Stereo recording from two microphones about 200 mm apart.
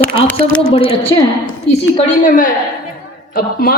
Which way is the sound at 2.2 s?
45° left (ahead or behind).